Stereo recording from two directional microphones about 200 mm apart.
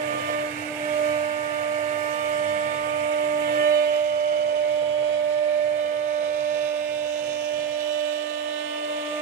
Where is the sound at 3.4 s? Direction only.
45° right (ahead or behind).